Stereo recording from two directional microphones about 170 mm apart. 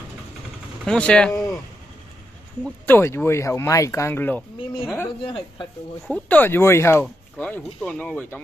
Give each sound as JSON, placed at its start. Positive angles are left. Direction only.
{"t": 0.8, "sound": "speech", "side_deg": 5}
{"t": 2.6, "sound": "speech", "side_deg": 15}
{"t": 5.2, "sound": "speech", "side_deg": 30}
{"t": 6.0, "sound": "speech", "side_deg": 10}